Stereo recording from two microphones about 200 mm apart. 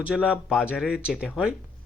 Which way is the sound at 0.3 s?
5° right (ahead or behind).